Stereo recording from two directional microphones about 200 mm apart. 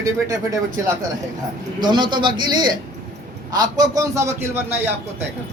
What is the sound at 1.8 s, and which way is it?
A man's voice, 20° right (ahead or behind).